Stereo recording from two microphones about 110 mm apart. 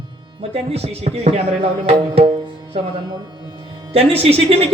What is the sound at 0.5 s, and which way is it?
Speech, 70° right (ahead or behind).